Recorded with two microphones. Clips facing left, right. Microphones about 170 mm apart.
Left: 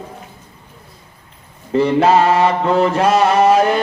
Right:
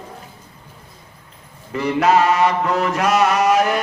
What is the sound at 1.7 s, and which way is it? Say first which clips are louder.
Mantra: left 4 dB; 30° left (ahead or behind).